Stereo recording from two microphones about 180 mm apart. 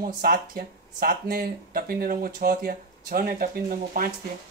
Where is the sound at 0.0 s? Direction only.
55° right (ahead or behind).